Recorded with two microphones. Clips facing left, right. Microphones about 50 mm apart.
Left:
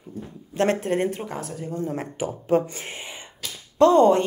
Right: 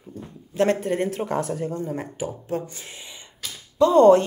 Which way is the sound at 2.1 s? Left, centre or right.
Left.